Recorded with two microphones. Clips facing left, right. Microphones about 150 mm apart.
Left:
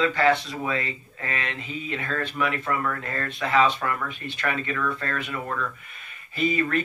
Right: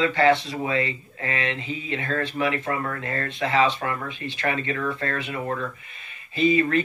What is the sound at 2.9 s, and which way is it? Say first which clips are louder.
Speech: right 2 dB; 25° right (ahead or behind).